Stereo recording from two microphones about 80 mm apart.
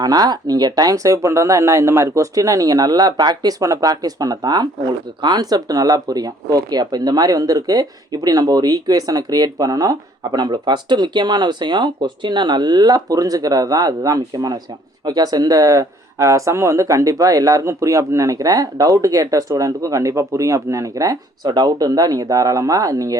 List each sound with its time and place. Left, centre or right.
0.0 s speech: right